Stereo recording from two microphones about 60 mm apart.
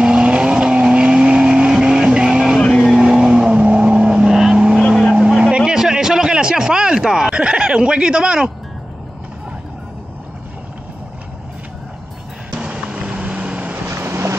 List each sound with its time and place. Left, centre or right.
0.0 s vehicle: centre
4.8 s vehicle: centre
5.6 s a sound: centre
12.5 s vehicle: centre
13.8 s boat: right